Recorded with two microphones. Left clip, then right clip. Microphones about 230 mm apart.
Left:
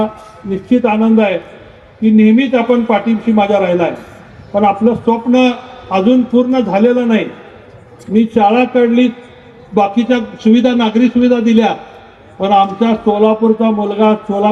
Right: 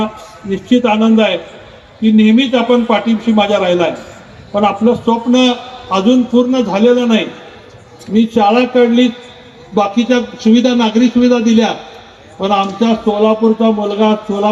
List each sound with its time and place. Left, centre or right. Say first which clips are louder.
0.7 s a man's voice: right 1 dB; left